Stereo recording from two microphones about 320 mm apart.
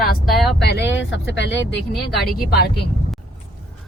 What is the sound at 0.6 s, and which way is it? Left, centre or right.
Speech, left.